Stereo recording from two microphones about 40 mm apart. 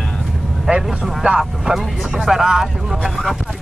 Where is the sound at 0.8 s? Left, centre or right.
Centre.